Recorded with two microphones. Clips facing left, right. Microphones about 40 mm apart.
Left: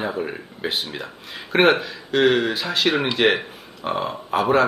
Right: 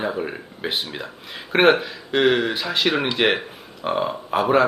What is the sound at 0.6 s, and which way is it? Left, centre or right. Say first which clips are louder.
A man's voice: even; centre.